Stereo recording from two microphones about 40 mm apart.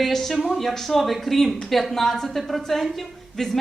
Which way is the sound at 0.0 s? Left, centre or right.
Centre.